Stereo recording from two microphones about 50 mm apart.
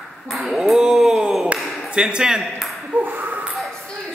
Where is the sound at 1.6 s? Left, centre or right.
Centre.